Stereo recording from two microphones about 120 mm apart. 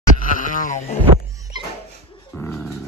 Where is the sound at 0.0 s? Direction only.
90° left.